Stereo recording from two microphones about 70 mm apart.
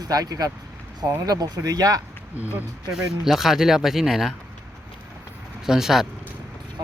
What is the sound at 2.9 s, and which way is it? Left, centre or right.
Speech, centre.